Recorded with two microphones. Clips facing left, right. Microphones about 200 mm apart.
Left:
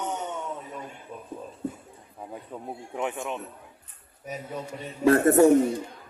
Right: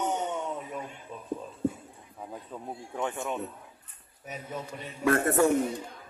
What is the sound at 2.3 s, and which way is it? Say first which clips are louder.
Speech: left 2 dB; 10° left (ahead or behind).